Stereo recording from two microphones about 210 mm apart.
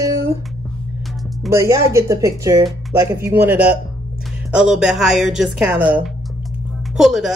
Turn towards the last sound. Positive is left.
turn(degrees=0)  # may be behind; listen again after turning